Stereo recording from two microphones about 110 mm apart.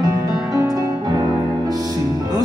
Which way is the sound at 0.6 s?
30° right (ahead or behind).